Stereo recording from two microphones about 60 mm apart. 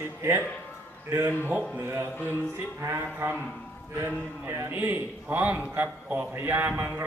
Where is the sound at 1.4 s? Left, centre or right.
Right.